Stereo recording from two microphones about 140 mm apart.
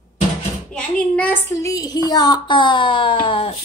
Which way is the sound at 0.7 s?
10° left (ahead or behind).